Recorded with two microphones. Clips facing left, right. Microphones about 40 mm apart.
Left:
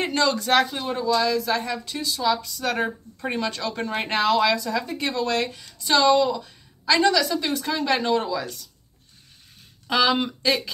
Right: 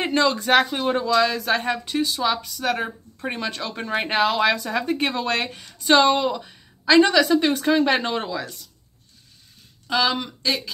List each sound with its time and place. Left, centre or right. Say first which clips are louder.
0.0 s speech: right 2 dB; centre
1.0 s speech: left 2 dB; right
1.9 s speech: right 5 dB; right
2.6 s speech: even; centre
4.5 s speech: right 2 dB; right
9.8 s speech: left 1 dB; centre